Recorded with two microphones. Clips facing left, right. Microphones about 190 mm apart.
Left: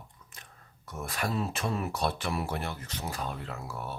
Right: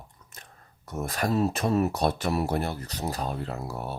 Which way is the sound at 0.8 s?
40° right (ahead or behind).